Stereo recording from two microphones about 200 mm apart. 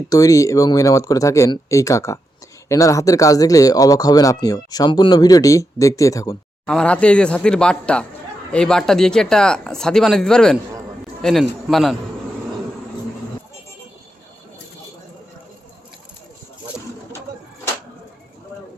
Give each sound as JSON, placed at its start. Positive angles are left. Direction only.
{"t": 0.1, "sound": "speech", "side_deg": 15}
{"t": 6.7, "sound": "a man's voice", "side_deg": 5}